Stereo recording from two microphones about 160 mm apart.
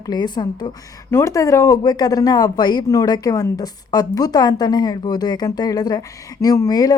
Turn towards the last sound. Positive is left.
turn(degrees=25)  # may be behind; listen again after turning